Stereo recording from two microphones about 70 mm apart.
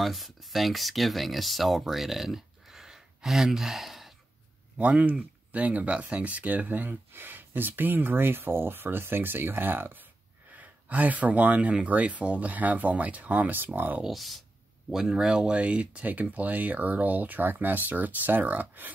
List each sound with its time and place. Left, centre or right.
0.0 s speech: centre
4.7 s speech: centre
14.0 s speech: centre; by 18.9 s right